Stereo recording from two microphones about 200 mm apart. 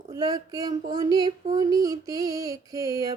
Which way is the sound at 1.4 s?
20° right (ahead or behind).